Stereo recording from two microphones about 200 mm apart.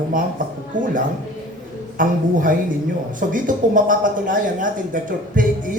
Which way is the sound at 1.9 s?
40° right (ahead or behind).